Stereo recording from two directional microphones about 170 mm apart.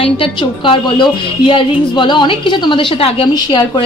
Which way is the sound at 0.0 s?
30° left (ahead or behind).